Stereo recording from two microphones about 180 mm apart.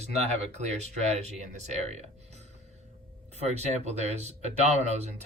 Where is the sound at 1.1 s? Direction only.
40° right (ahead or behind).